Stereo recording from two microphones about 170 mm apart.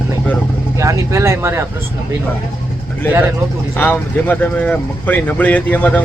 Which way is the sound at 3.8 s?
10° left (ahead or behind).